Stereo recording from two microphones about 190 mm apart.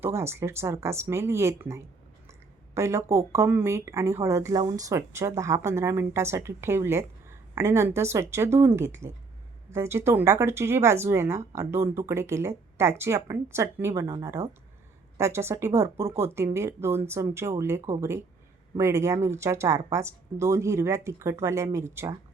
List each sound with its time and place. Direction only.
0.0 s a woman's voice: 15° right (ahead or behind)